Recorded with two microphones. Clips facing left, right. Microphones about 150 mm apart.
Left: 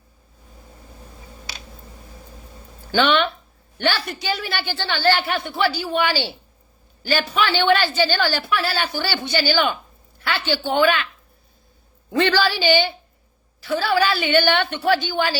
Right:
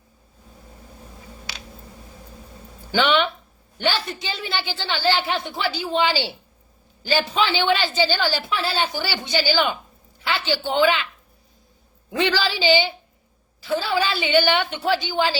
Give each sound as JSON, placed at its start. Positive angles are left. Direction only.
{"t": 2.9, "sound": "a woman's voice", "side_deg": -15}
{"t": 10.2, "sound": "a sound", "side_deg": -15}
{"t": 10.7, "sound": "a woman's voice", "side_deg": -15}
{"t": 12.1, "sound": "a woman's voice", "side_deg": -10}